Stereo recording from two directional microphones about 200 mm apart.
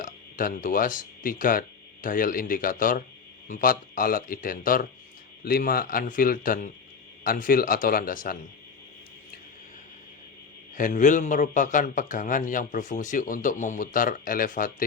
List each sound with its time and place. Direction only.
0.0 s speech: 45° left (ahead or behind)
10.8 s a man's voice: 40° left (ahead or behind)